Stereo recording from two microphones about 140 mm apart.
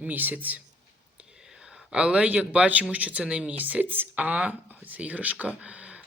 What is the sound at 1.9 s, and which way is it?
Speech, 5° right (ahead or behind).